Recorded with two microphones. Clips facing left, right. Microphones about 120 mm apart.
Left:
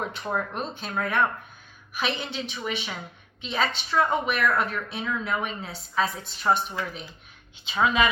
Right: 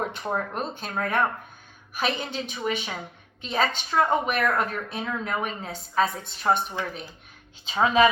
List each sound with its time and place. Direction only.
0.0 s speech: 40° right (ahead or behind)
7.7 s a woman's voice: 35° right (ahead or behind)